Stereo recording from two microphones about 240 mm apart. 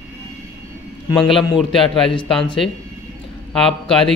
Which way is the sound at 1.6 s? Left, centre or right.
Centre.